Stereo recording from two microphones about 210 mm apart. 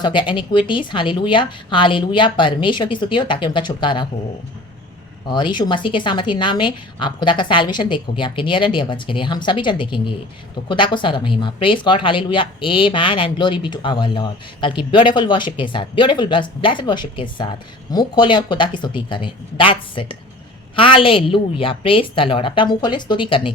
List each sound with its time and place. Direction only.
0.0 s speech: 20° left (ahead or behind)
5.3 s speech: 20° left (ahead or behind)